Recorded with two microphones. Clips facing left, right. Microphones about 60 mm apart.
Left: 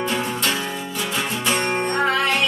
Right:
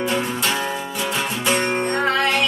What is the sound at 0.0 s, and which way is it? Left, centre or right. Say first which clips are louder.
Music: right 1 dB; centre.